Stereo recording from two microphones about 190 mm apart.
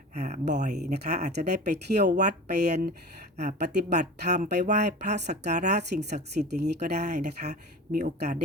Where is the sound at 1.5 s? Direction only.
60° right (ahead or behind).